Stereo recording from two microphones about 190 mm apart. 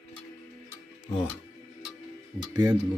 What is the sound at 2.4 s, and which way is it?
Speech, 20° right (ahead or behind).